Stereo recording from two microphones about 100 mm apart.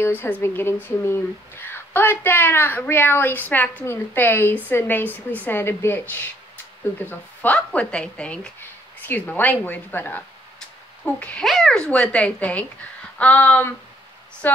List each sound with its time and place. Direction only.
0.0 s speech: 20° left (ahead or behind)
11.4 s a woman's voice: 5° left (ahead or behind); by 14.6 s 20° left (ahead or behind)